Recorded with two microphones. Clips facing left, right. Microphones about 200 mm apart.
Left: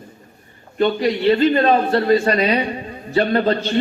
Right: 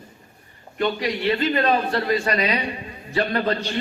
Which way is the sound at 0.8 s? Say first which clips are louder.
Left 6 dB; 25° left (ahead or behind).